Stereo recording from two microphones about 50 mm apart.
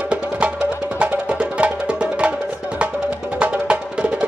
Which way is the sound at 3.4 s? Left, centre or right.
Right.